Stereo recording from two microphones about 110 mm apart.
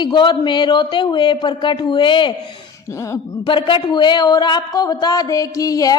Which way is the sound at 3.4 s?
45° left (ahead or behind).